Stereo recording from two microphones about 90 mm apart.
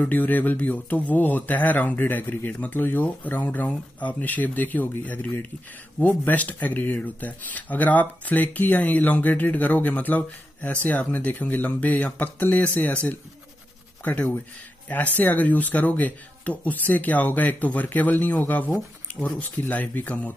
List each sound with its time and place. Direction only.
0.0 s speech: 20° left (ahead or behind)